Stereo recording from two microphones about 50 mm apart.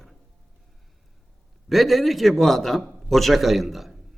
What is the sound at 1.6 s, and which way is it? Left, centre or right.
A man's voice, centre.